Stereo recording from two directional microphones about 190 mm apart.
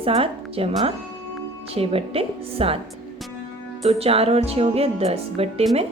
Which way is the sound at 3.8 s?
30° right (ahead or behind).